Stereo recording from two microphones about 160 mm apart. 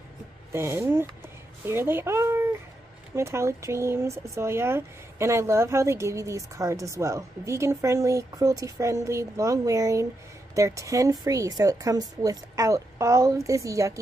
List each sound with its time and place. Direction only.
0.5 s speech: 15° right (ahead or behind)